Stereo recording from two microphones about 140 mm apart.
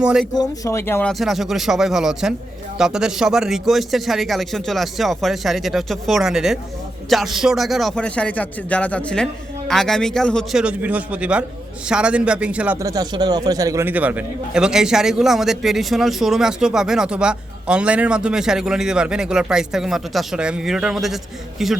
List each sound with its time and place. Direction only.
0.0 s a man's voice: 5° right (ahead or behind)
0.3 s speech: 25° left (ahead or behind)
1.2 s a man's voice: centre (ahead or behind)
10.6 s a man's voice: 10° right (ahead or behind)
12.8 s a man's voice: 25° right (ahead or behind); by 21.8 s centre (ahead or behind)